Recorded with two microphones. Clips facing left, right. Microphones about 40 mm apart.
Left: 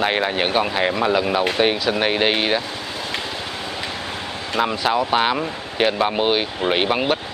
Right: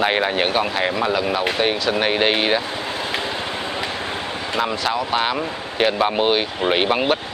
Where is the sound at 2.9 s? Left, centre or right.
Centre.